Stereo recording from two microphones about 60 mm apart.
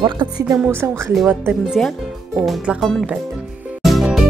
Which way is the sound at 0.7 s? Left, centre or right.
Right.